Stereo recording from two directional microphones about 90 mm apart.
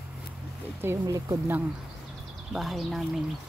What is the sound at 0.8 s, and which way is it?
Speech, 35° right (ahead or behind).